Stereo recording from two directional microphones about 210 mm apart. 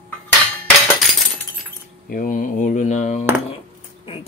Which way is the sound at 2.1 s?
40° left (ahead or behind).